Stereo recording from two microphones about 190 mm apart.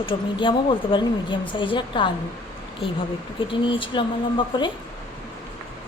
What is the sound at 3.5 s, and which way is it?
Speech, 25° left (ahead or behind).